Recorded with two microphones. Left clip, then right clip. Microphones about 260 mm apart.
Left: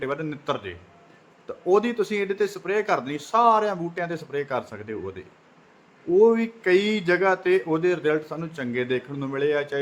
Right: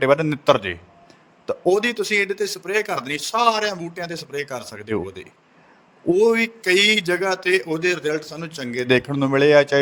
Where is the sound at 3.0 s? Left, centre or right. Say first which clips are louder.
Right 1 dB; right.